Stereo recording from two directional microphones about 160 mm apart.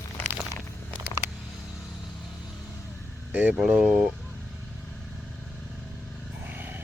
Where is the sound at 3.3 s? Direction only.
5° right (ahead or behind).